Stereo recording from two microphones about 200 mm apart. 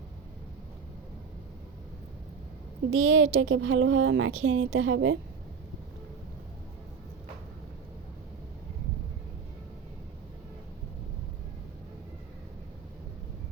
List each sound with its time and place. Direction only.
2.9 s speech: 90° right; by 5.1 s 75° right (ahead or behind)